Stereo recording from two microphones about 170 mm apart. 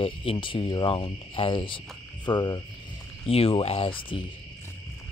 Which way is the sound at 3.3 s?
35° left (ahead or behind).